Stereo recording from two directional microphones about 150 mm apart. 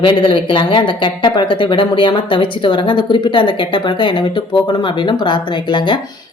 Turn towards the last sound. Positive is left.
turn(degrees=30)  # may be behind; listen again after turning